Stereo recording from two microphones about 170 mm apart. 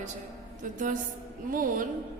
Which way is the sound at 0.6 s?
50° right (ahead or behind).